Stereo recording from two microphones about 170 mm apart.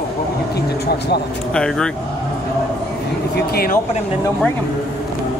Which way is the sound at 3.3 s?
60° left (ahead or behind).